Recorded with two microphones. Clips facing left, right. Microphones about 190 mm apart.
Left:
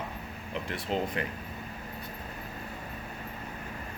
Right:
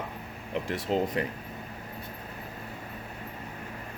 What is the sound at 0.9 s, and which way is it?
Speech, 40° right (ahead or behind).